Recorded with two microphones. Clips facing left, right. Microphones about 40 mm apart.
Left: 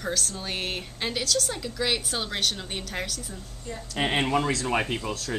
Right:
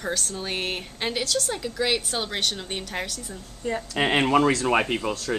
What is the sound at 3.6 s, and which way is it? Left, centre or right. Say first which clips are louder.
Speech: right 10 dB; right.